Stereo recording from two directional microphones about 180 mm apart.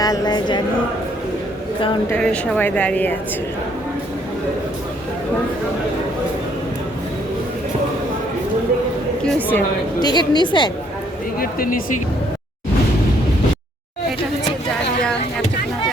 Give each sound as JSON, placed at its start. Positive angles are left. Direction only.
{"t": 0.0, "sound": "speech", "side_deg": 20}
{"t": 2.0, "sound": "speech", "side_deg": 5}
{"t": 9.2, "sound": "speech", "side_deg": 5}
{"t": 10.0, "sound": "a woman's voice", "side_deg": 25}
{"t": 11.3, "sound": "speech", "side_deg": 55}